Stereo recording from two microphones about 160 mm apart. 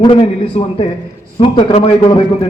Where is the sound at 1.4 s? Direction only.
40° left (ahead or behind).